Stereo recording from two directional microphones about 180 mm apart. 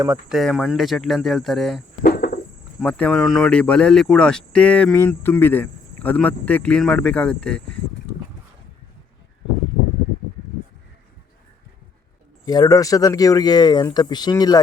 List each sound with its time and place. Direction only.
0.3 s speech: centre (ahead or behind)
2.0 s a sound: 55° left (ahead or behind)
2.8 s speech: 5° left (ahead or behind)
12.5 s speech: 20° left (ahead or behind)